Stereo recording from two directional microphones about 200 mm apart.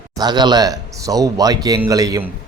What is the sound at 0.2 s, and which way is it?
Speech, 20° right (ahead or behind).